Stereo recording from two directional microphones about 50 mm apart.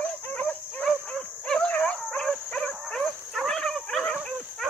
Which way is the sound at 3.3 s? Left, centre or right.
Centre.